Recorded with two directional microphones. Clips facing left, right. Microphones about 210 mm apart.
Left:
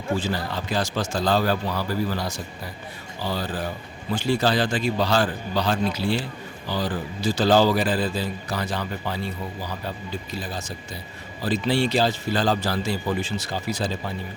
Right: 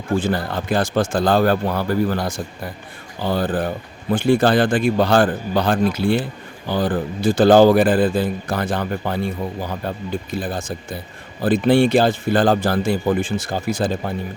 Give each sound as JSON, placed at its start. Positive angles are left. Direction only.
{"t": 0.1, "sound": "a man's voice", "side_deg": -55}